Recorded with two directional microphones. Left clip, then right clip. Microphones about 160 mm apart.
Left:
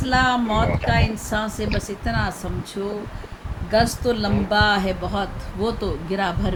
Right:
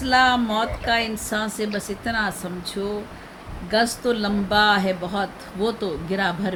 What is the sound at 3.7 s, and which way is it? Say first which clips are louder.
Speech: left 1 dB; 5° right (ahead or behind).